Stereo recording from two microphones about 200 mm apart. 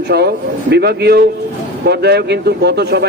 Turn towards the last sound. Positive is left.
turn(degrees=-55)  # may be behind; listen again after turning